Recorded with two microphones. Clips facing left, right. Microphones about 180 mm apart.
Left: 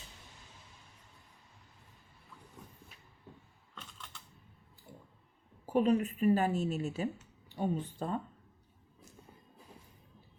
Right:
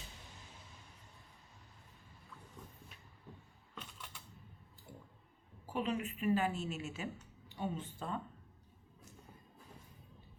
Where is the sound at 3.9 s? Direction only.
10° right (ahead or behind).